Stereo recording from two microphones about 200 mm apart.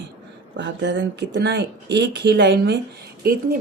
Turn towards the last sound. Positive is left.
turn(degrees=-50)  # may be behind; listen again after turning